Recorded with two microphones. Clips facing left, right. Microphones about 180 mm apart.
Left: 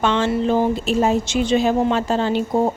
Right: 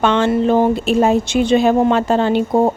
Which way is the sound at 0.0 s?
60° right (ahead or behind).